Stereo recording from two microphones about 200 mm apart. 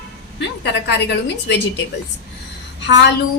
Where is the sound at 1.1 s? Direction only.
60° left (ahead or behind).